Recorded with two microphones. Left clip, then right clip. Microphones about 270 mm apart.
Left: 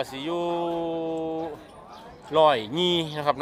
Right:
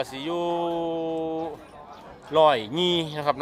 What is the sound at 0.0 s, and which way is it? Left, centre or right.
A man's voice, centre.